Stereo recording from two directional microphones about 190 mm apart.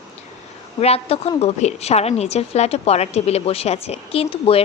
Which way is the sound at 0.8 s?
30° left (ahead or behind).